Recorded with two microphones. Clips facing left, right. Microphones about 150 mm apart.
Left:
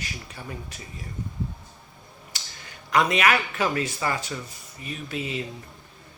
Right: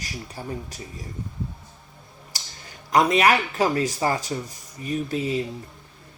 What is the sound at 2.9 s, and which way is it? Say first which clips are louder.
Speech: right 3 dB; 35° right (ahead or behind).